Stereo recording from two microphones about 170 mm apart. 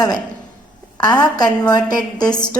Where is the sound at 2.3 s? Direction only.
5° left (ahead or behind).